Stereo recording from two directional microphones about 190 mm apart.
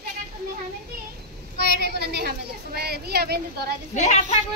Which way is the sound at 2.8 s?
60° right (ahead or behind).